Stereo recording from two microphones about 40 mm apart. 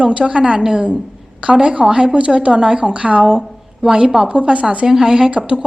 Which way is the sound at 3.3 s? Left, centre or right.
Centre.